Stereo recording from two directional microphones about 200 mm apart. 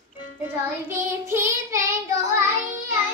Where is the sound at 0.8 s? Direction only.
10° right (ahead or behind).